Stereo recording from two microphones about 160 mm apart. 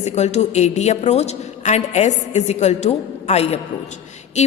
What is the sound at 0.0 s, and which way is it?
A woman's voice, 45° left (ahead or behind).